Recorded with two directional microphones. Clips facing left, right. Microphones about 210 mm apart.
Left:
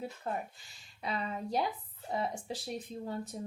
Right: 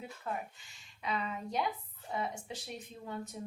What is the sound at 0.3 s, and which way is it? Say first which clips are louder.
Speech: right 1 dB; 30° left (ahead or behind).